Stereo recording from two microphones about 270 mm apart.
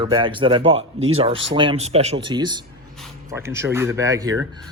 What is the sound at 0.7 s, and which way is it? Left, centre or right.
Speech, right.